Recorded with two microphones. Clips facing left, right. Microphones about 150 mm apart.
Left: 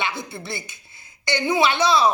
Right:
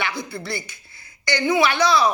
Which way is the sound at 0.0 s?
25° left (ahead or behind).